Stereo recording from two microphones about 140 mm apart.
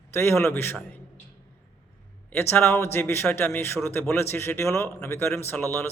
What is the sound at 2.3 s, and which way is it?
A man's voice, 15° left (ahead or behind).